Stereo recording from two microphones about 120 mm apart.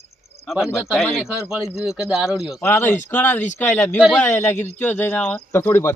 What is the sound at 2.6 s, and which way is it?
A man's voice, 20° left (ahead or behind).